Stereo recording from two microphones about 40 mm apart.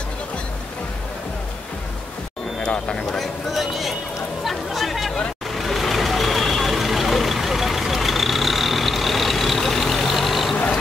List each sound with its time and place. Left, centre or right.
2.6 s speech: left
3.5 s speech: centre
4.5 s chatter: centre
5.5 s vehicle: centre